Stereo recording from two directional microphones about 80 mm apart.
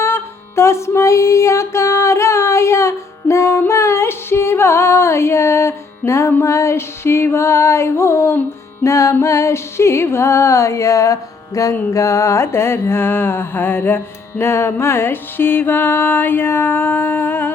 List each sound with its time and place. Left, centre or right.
0.0 s music: left
11.7 s mantra: left